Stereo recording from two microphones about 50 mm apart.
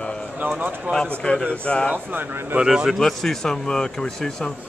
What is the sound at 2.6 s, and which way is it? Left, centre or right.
Speech, centre.